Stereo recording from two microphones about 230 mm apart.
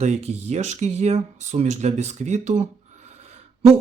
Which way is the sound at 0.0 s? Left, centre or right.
Right.